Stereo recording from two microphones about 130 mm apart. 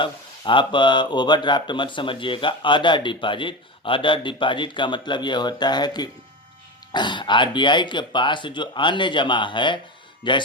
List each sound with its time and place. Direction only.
0.0 s speech: 40° left (ahead or behind)